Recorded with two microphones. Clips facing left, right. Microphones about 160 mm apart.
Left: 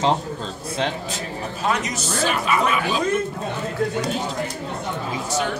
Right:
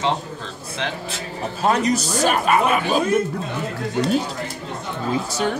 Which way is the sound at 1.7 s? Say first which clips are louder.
Right 6 dB; 35° right (ahead or behind).